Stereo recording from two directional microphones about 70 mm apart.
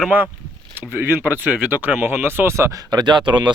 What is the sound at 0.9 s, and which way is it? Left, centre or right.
Speech, right.